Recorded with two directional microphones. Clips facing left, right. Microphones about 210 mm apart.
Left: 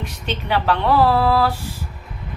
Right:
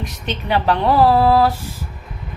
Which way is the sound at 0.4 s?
20° right (ahead or behind).